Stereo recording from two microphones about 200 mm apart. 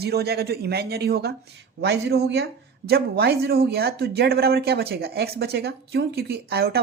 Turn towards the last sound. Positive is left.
turn(degrees=-50)  # may be behind; listen again after turning